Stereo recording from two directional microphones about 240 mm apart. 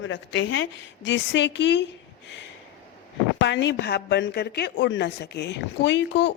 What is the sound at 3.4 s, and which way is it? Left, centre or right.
A woman's voice, left.